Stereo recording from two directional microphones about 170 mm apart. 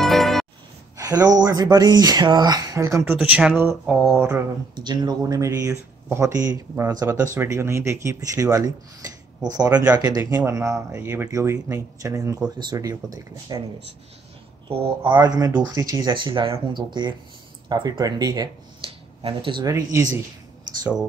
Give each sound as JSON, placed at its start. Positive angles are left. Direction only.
{"t": 0.0, "sound": "music", "side_deg": 0}
{"t": 0.9, "sound": "speech", "side_deg": -20}
{"t": 3.2, "sound": "speech", "side_deg": -5}
{"t": 4.2, "sound": "speech", "side_deg": -20}
{"t": 15.0, "sound": "speech", "side_deg": -25}
{"t": 19.7, "sound": "speech", "side_deg": -15}